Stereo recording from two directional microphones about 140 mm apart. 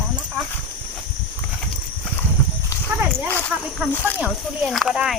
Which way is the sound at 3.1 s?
10° left (ahead or behind).